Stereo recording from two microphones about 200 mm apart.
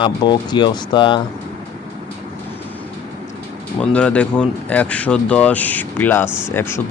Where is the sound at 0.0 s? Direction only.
20° left (ahead or behind).